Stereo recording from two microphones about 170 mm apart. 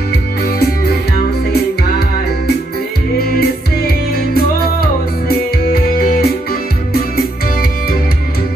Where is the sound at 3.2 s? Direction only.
65° left (ahead or behind).